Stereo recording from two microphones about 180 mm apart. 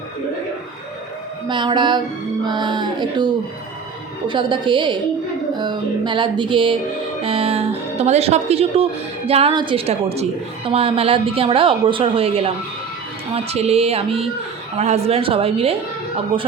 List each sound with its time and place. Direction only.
1.5 s music: 25° right (ahead or behind)
7.2 s speech: 30° right (ahead or behind)